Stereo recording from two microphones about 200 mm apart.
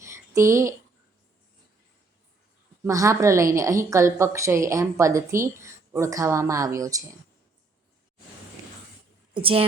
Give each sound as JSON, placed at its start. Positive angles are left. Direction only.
{"t": 0.0, "sound": "a sound", "side_deg": -15}
{"t": 2.8, "sound": "a woman's voice", "side_deg": -15}
{"t": 9.3, "sound": "a woman's voice", "side_deg": -25}